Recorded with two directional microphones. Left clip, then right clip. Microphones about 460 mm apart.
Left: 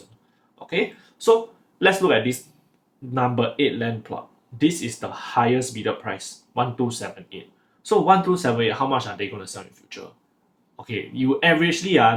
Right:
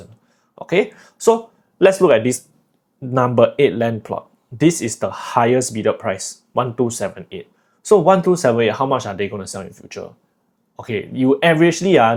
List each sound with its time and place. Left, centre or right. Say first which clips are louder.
1.8 s speech: right 6 dB; right
7.9 s speech: right 5 dB; right